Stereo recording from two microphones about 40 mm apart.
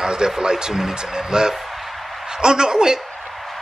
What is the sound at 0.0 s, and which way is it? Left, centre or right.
Speech, centre.